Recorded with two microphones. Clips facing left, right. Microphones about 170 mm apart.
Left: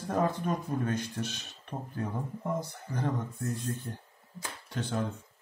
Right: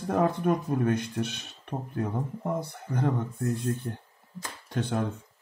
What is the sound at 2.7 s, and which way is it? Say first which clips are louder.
Speech: right 4 dB; 60° right (ahead or behind).